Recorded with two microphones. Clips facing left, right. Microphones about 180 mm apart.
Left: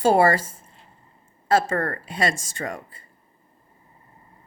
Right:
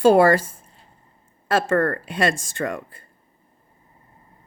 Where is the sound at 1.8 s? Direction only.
55° right (ahead or behind).